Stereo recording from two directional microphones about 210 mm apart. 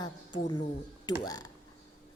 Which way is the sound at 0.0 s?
20° left (ahead or behind).